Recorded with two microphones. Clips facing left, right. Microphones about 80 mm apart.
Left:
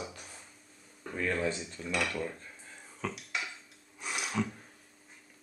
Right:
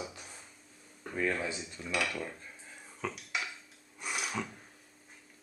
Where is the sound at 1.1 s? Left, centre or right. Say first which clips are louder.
Left 1 dB; centre.